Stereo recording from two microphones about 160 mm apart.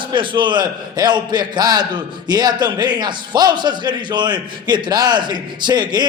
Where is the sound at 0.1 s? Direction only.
30° right (ahead or behind).